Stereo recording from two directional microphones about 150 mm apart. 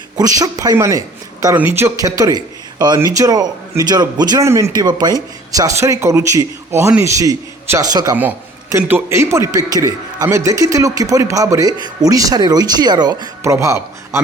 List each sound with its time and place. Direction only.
0.2 s speech: 25° right (ahead or behind)
1.5 s speech: 10° right (ahead or behind)
2.0 s a man's voice: 25° right (ahead or behind)
8.8 s a man's voice: 10° right (ahead or behind)